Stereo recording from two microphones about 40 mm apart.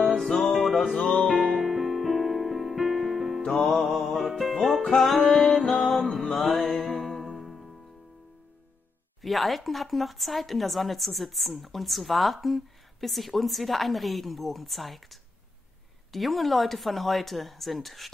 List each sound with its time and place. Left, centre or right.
0.2 s music: centre
0.9 s music: centre
1.5 s music: centre
3.4 s music: centre
9.2 s speech: centre